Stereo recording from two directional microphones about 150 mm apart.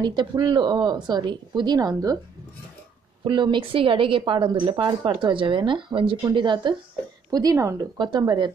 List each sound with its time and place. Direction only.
0.0 s speech: 30° right (ahead or behind)
3.3 s a woman's voice: 30° right (ahead or behind)